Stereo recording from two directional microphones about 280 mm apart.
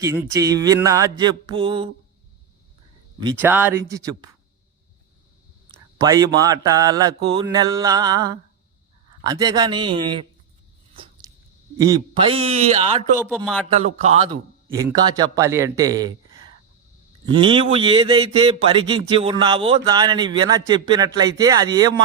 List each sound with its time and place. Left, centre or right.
0.0 s a man's voice: centre
3.4 s a man's voice: centre
6.0 s a man's voice: centre
11.2 s a sound: centre
11.8 s a man's voice: centre
13.2 s speech: centre
13.7 s a man's voice: right
14.7 s a man's voice: centre
17.2 s a man's voice: centre